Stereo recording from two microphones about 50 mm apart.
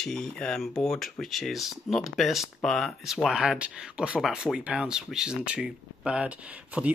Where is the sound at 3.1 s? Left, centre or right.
Centre.